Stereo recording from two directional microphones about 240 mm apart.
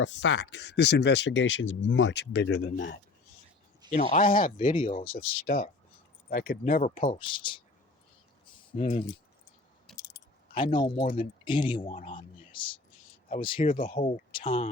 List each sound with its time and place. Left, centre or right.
0.0 s speech: left
3.9 s speech: left
5.5 s speech: left
7.0 s speech: left
8.7 s speech: left
10.0 s keys jangling: centre
11.4 s speech: centre